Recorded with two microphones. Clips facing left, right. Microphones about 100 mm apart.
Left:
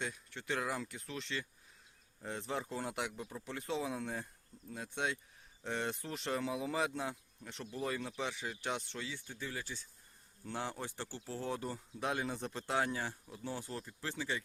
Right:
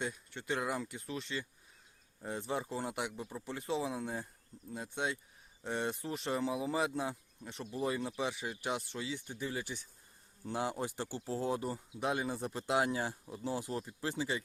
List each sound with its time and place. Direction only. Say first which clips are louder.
0.0 s speech: right 2 dB; centre (ahead or behind)
9.0 s speech: right 5 dB; 20° right (ahead or behind)
11.6 s speech: right 3 dB; 5° right (ahead or behind)